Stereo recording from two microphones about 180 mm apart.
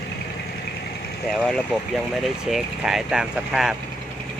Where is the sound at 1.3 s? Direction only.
Centre (ahead or behind).